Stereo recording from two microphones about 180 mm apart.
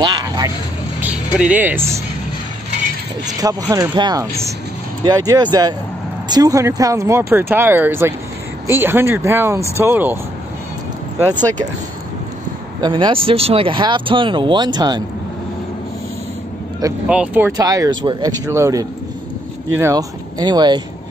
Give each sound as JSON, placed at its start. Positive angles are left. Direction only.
{"t": 0.0, "sound": "a sound", "side_deg": -25}
{"t": 1.0, "sound": "speech", "side_deg": -5}
{"t": 3.3, "sound": "speech", "side_deg": -20}
{"t": 12.8, "sound": "speech", "side_deg": -25}
{"t": 17.1, "sound": "speech", "side_deg": -10}
{"t": 17.6, "sound": "speech", "side_deg": -20}